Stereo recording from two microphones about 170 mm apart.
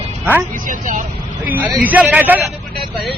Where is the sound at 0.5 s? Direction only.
50° right (ahead or behind).